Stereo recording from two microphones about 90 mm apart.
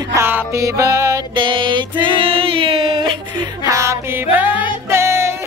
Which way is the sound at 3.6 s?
35° right (ahead or behind).